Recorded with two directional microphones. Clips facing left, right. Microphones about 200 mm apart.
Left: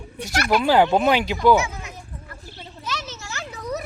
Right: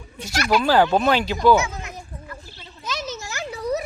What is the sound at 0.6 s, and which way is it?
Speech, 20° left (ahead or behind).